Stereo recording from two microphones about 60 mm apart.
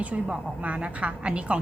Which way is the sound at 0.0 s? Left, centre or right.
Right.